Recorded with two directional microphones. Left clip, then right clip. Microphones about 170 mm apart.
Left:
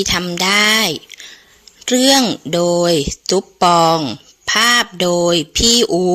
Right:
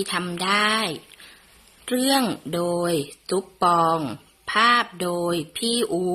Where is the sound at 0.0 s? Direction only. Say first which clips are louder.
Left 9 dB; 35° left (ahead or behind).